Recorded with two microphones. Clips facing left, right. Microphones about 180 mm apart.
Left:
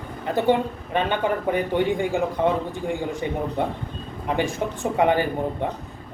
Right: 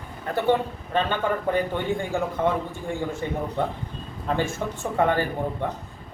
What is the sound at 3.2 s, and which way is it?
A man's voice, 15° left (ahead or behind).